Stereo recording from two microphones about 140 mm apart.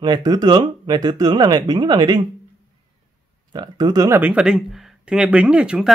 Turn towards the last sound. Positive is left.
turn(degrees=-5)  # may be behind; listen again after turning